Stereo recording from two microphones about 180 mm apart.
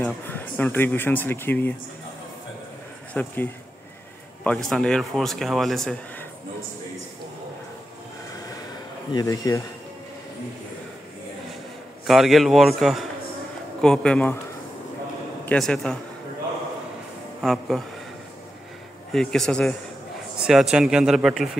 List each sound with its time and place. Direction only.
0.0 s speech: 10° left (ahead or behind)
3.1 s speech: 10° left (ahead or behind)
4.5 s speech: 5° left (ahead or behind)
9.1 s speech: 20° left (ahead or behind)
12.1 s speech: centre (ahead or behind)
15.4 s speech: 5° left (ahead or behind)
17.4 s speech: centre (ahead or behind)
19.1 s speech: 5° left (ahead or behind)
20.3 s a sound: 5° right (ahead or behind)
20.7 s speech: 5° right (ahead or behind)